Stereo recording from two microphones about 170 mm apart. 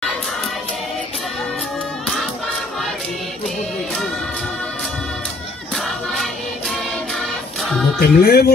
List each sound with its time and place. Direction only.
5.8 s choir: centre (ahead or behind)
6.7 s music: centre (ahead or behind)
8.0 s music: 65° left (ahead or behind)